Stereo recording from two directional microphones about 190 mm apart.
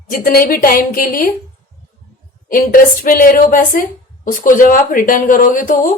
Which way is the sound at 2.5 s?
45° left (ahead or behind).